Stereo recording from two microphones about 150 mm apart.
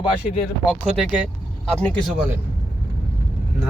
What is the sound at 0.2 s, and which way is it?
Speech, 50° left (ahead or behind).